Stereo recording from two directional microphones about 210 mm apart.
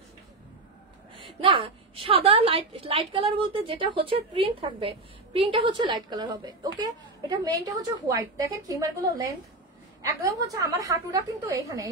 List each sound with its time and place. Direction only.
1.1 s a woman's voice: 25° right (ahead or behind)